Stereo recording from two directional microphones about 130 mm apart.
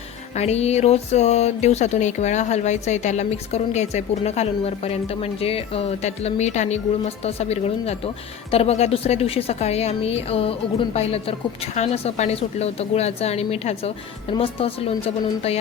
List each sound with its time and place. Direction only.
0.3 s a woman's voice: 55° left (ahead or behind)